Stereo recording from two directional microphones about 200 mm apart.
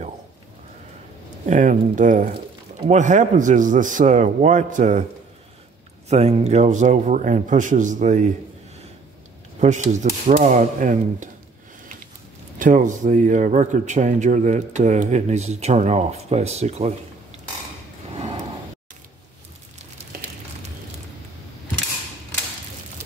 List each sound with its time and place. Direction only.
1.4 s a man's voice: 40° right (ahead or behind)
6.0 s a man's voice: 35° right (ahead or behind)
9.6 s a man's voice: 35° right (ahead or behind)
12.5 s a man's voice: 40° right (ahead or behind)
18.1 s a sound: 30° right (ahead or behind)